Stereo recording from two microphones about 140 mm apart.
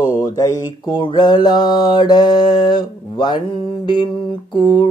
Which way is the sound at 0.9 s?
30° left (ahead or behind).